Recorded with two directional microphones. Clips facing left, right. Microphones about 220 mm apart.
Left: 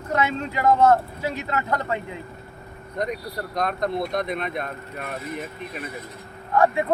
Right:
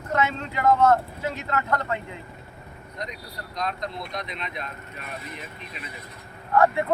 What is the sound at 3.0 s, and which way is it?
Speech, 55° left (ahead or behind).